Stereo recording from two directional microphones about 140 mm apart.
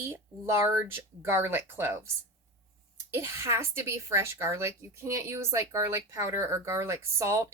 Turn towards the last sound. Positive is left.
turn(degrees=-20)  # may be behind; listen again after turning